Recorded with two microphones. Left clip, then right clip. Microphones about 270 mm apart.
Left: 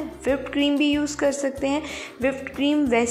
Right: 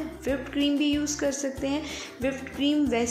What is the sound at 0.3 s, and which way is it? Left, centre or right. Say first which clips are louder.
Speech: left 5 dB; centre.